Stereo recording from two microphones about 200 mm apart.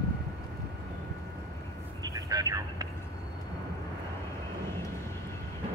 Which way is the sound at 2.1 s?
15° right (ahead or behind).